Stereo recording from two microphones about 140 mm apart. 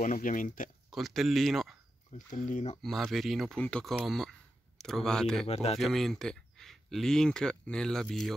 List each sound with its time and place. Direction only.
0.0 s speech: 70° left (ahead or behind)
0.8 s speech: centre (ahead or behind)
2.3 s speech: 65° left (ahead or behind)
2.8 s speech: centre (ahead or behind)
5.5 s speech: 50° left (ahead or behind)
5.8 s speech: centre (ahead or behind)